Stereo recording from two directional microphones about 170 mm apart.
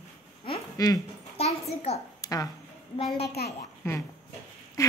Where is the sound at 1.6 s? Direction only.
40° left (ahead or behind).